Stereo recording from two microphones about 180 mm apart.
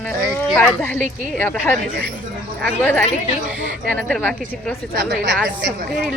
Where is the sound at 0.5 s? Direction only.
10° left (ahead or behind).